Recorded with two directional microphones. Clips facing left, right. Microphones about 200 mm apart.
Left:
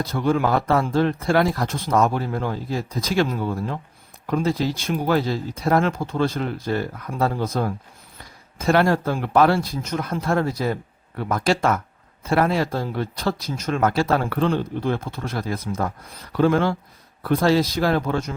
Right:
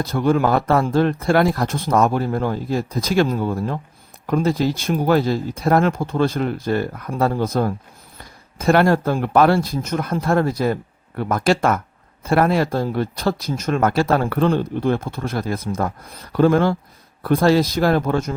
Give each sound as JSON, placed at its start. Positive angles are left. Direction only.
{"t": 0.0, "sound": "speech", "side_deg": -50}